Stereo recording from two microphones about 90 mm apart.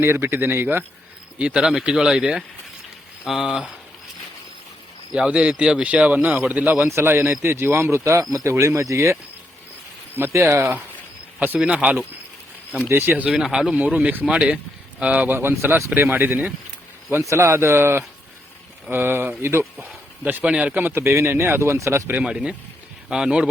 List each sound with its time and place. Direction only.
0.0 s a man's voice: 30° right (ahead or behind)
1.4 s speech: 10° right (ahead or behind)
5.1 s a man's voice: 10° right (ahead or behind); by 9.1 s 35° right (ahead or behind)
10.2 s a man's voice: 30° right (ahead or behind)
13.3 s a man's voice: 5° right (ahead or behind); by 19.6 s 30° right (ahead or behind)
20.2 s a man's voice: 15° right (ahead or behind); by 22.1 s 30° right (ahead or behind)
22.1 s speech: 10° right (ahead or behind)